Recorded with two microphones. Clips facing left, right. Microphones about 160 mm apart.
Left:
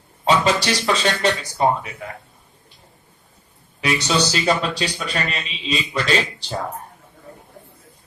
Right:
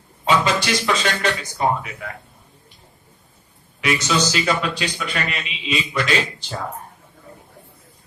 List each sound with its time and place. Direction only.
0.3 s speech: 35° left (ahead or behind)
3.8 s speech: 35° left (ahead or behind)